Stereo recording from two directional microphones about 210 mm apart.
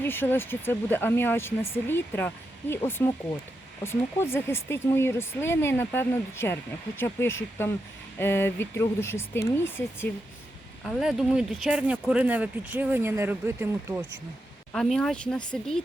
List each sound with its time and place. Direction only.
0.0 s speech: 10° left (ahead or behind)
10.8 s speech: centre (ahead or behind)
14.7 s speech: centre (ahead or behind)